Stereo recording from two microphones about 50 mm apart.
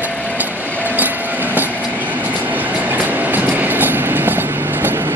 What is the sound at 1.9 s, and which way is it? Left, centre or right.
Train, right.